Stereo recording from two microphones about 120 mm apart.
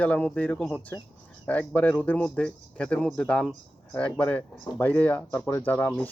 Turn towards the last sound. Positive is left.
turn(degrees=15)  # may be behind; listen again after turning